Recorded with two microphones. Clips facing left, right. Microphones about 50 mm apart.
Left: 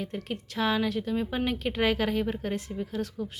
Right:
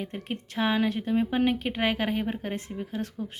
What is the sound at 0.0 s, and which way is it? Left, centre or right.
A woman's voice, right.